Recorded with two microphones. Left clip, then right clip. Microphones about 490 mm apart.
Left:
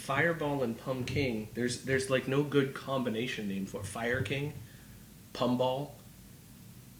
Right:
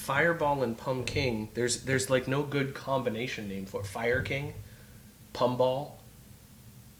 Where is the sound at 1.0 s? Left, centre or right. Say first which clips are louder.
Right 3 dB; right.